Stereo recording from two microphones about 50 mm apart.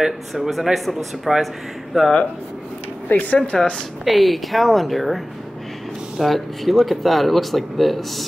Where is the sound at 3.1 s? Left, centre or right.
Left.